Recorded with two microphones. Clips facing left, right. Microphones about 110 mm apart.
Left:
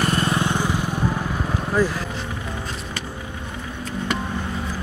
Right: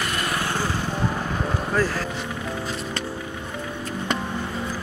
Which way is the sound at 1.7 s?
15° left (ahead or behind).